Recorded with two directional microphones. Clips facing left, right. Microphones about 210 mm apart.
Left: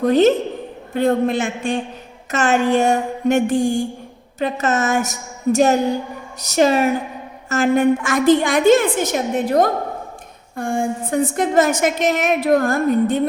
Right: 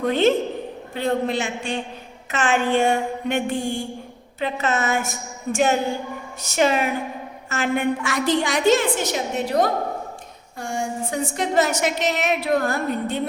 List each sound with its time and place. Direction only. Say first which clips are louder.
0.0 s a woman's voice: left 5 dB; 40° left (ahead or behind)
10.6 s a sound: left 5 dB; 55° left (ahead or behind)
11.3 s a woman's voice: left 3 dB; 50° left (ahead or behind)